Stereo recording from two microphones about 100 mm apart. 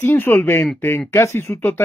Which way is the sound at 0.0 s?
20° left (ahead or behind).